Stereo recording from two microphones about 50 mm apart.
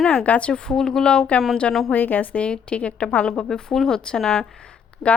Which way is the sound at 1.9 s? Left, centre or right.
Left.